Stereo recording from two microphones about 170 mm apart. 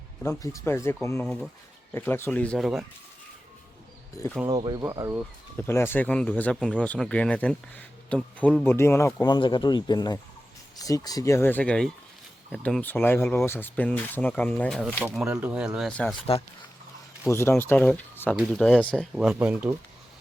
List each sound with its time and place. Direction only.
0.2 s speech: 20° left (ahead or behind); by 2.8 s centre (ahead or behind)
4.4 s speech: 25° right (ahead or behind)
5.5 s speech: 15° left (ahead or behind); by 15.9 s 5° right (ahead or behind)
15.9 s speech: 5° left (ahead or behind)
17.2 s speech: 15° left (ahead or behind)
19.1 s speech: 5° right (ahead or behind)